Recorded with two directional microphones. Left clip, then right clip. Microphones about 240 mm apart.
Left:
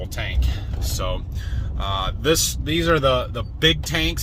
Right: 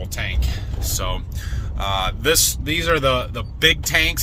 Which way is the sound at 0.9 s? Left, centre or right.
Centre.